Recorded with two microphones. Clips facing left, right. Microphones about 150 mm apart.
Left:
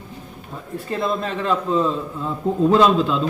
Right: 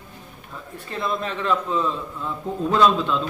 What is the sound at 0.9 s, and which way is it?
A man's voice, 30° left (ahead or behind).